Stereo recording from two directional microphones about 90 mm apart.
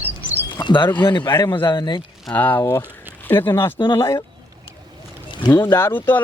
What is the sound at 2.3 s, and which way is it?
Speech, 20° left (ahead or behind).